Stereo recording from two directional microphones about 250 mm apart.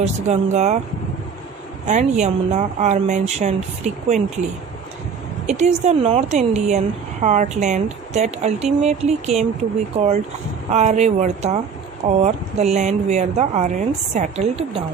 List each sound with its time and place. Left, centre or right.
0.5 s speech: right
1.9 s speech: right
5.5 s speech: right